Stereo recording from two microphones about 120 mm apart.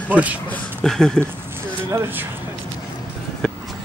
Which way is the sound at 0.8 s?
5° left (ahead or behind).